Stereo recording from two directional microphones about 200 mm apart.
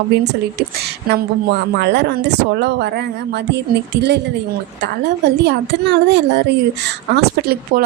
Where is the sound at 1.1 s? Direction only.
60° right (ahead or behind).